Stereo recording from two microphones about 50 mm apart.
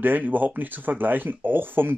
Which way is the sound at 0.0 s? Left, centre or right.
Right.